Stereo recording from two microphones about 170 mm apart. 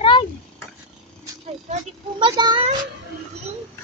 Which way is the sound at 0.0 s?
30° left (ahead or behind).